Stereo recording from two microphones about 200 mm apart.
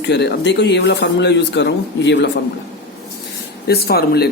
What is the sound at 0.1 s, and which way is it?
Speech, 60° left (ahead or behind).